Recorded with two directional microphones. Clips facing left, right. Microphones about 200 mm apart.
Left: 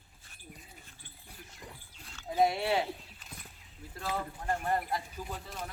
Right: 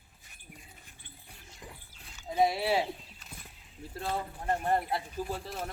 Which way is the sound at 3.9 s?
25° right (ahead or behind).